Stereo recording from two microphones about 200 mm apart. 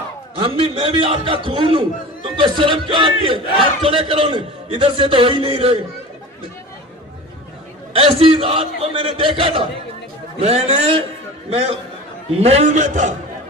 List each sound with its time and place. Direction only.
0.4 s a man's voice: 30° right (ahead or behind)
7.9 s a man's voice: 25° right (ahead or behind)